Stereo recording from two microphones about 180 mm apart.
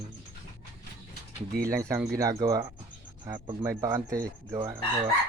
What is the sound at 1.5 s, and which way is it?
Speech, 50° right (ahead or behind).